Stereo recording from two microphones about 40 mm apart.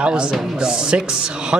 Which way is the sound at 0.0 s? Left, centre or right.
Right.